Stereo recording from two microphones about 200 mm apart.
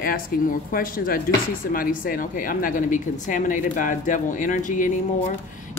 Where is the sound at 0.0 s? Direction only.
45° left (ahead or behind).